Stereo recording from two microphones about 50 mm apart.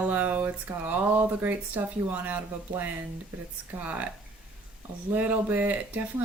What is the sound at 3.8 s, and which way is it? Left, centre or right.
Speech, right.